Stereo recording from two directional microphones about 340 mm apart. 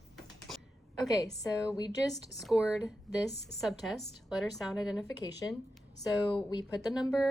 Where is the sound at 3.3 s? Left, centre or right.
Left.